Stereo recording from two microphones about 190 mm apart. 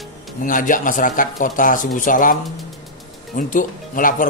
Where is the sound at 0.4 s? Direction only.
45° left (ahead or behind).